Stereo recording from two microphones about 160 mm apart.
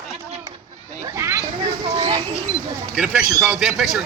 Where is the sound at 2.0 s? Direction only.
30° right (ahead or behind).